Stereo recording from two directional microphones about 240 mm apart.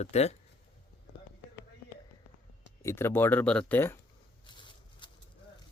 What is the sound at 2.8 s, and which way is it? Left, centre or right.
Speech, centre.